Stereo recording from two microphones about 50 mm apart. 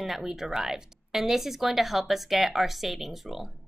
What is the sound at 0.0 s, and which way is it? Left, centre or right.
A woman's voice, centre.